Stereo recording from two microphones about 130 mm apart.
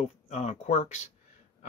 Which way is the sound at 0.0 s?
60° left (ahead or behind).